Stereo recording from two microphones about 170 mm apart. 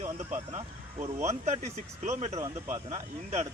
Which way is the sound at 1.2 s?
40° right (ahead or behind).